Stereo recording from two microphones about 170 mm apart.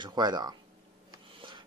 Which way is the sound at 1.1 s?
25° right (ahead or behind).